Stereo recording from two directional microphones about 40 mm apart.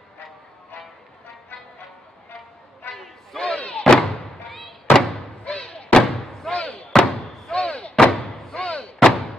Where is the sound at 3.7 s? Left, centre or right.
Left.